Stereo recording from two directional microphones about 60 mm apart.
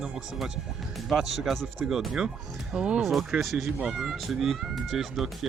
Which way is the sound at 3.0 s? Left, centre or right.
Centre.